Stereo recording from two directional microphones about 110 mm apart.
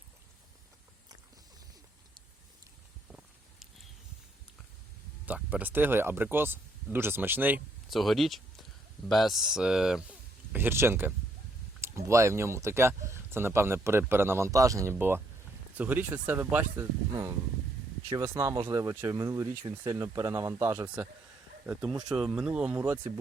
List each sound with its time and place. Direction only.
3.1 s a sound: centre (ahead or behind)
5.2 s speech: 15° right (ahead or behind)
7.9 s speech: centre (ahead or behind); by 16.8 s 15° right (ahead or behind)
17.1 s speech: 25° right (ahead or behind)
20.8 s speech: 10° right (ahead or behind)
22.1 s speech: 5° right (ahead or behind)